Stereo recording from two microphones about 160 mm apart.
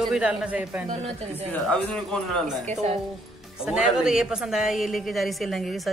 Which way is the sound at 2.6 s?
40° right (ahead or behind).